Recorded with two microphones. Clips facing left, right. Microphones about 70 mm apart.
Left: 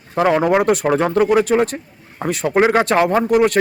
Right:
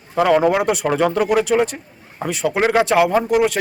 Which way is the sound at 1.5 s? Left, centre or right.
Left.